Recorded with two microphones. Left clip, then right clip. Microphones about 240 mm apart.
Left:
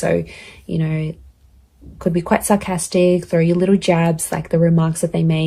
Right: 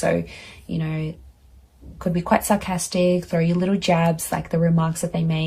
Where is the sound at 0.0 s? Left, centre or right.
Left.